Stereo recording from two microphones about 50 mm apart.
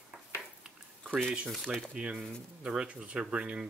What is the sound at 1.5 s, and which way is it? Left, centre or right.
Speech, centre.